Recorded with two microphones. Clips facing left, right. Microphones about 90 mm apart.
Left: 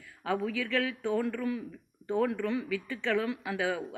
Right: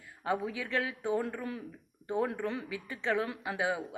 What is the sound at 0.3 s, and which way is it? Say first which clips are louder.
Speech: left 2 dB; 20° right (ahead or behind).